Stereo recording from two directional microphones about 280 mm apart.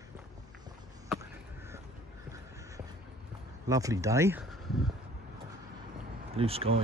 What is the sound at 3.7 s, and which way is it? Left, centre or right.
Speech, centre.